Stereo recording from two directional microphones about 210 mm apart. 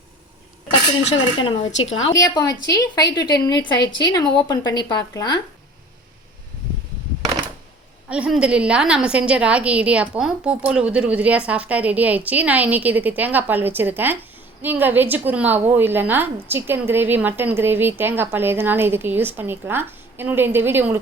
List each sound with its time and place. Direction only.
1.4 s a woman's voice: 25° left (ahead or behind)
8.1 s a woman's voice: 5° right (ahead or behind)